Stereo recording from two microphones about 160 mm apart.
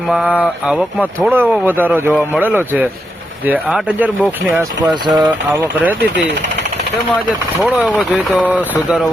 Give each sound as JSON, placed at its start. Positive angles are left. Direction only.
{"t": 0.1, "sound": "speech", "side_deg": -5}
{"t": 4.9, "sound": "speech", "side_deg": -30}
{"t": 7.6, "sound": "speech", "side_deg": -5}